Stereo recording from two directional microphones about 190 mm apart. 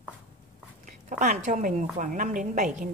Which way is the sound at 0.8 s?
45° right (ahead or behind).